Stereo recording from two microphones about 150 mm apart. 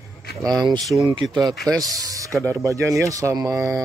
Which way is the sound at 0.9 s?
35° right (ahead or behind).